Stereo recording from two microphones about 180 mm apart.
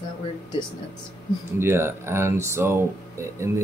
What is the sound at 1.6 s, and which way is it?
Speech, 15° right (ahead or behind).